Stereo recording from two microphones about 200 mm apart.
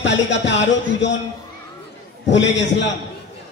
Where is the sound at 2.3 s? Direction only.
65° left (ahead or behind).